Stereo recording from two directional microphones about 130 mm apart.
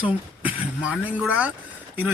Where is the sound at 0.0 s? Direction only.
10° right (ahead or behind).